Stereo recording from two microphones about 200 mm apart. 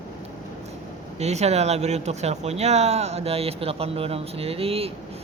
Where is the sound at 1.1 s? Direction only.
35° right (ahead or behind).